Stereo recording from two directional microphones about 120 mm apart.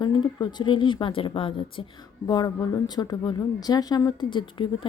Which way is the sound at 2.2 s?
35° left (ahead or behind).